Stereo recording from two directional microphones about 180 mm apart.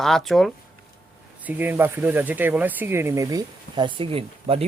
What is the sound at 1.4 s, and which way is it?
Speech, 10° right (ahead or behind).